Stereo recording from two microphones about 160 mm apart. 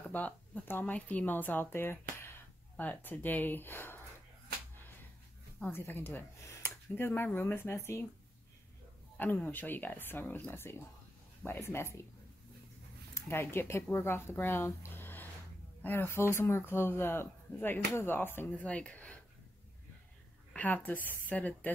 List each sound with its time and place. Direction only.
0.1 s speech: 10° left (ahead or behind)
5.6 s speech: 15° left (ahead or behind)
9.1 s speech: 10° left (ahead or behind)
13.1 s speech: 15° left (ahead or behind)
20.5 s speech: 10° left (ahead or behind)